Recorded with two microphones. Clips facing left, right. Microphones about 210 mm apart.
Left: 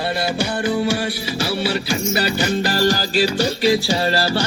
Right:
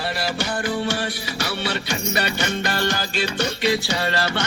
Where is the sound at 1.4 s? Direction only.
30° left (ahead or behind).